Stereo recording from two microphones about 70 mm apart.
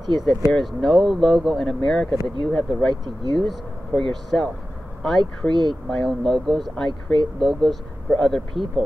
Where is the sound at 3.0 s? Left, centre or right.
Right.